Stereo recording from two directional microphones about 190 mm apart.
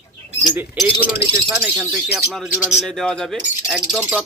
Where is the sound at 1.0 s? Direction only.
10° right (ahead or behind).